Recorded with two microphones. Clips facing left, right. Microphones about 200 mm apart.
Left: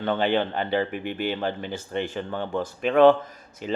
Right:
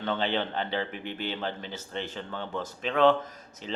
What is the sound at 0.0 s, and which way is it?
Speech, 55° left (ahead or behind).